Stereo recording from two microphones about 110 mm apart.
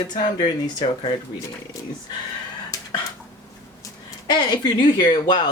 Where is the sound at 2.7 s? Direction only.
35° left (ahead or behind).